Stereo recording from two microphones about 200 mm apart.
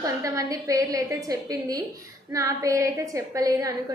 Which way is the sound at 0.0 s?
15° right (ahead or behind).